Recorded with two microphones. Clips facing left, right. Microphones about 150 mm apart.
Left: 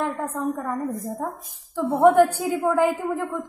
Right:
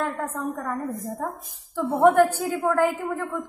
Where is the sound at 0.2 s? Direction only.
10° left (ahead or behind).